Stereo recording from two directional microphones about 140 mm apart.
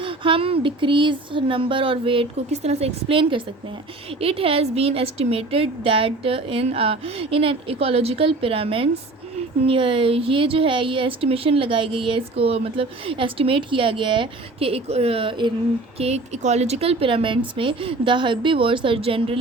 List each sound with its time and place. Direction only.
0.0 s a woman's voice: 40° right (ahead or behind)
16.0 s a woman's voice: 50° right (ahead or behind)